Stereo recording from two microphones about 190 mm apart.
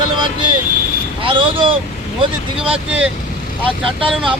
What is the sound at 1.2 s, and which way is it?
Speech, 25° right (ahead or behind).